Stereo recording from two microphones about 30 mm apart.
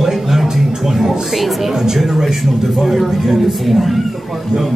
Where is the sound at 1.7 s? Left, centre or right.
Centre.